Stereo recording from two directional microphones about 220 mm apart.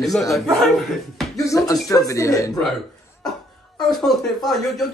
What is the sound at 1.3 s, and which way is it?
Speech, 15° left (ahead or behind).